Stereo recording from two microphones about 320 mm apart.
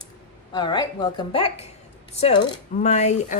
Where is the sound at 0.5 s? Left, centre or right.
Centre.